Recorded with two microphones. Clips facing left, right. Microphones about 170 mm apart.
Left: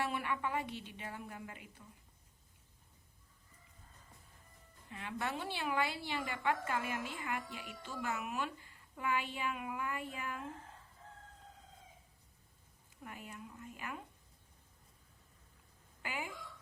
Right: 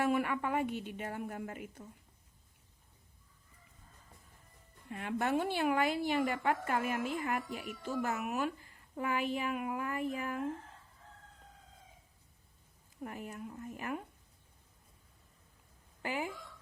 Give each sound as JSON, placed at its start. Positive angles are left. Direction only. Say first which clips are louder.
{"t": 0.0, "sound": "a woman's voice", "louder": "right 6 dB", "side_deg": -45}
{"t": 4.9, "sound": "a woman's voice", "louder": "right 7 dB", "side_deg": -50}
{"t": 13.0, "sound": "a woman's voice", "louder": "right 7 dB", "side_deg": -40}
{"t": 16.0, "sound": "speech", "louder": "right 6 dB", "side_deg": -40}